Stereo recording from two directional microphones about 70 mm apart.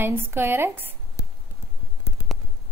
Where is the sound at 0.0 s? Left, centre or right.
Right.